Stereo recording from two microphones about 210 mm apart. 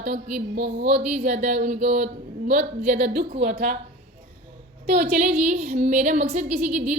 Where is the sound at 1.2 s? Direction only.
35° right (ahead or behind).